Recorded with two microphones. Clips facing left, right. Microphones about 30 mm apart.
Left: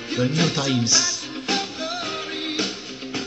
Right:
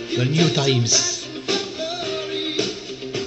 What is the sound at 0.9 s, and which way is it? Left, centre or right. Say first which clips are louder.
Music: even; left.